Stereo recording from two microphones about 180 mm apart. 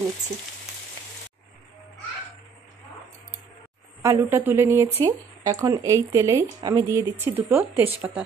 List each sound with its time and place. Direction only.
4.0 s speech: 15° right (ahead or behind)